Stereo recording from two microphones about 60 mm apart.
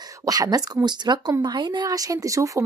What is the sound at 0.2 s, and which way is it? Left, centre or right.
Speech, right.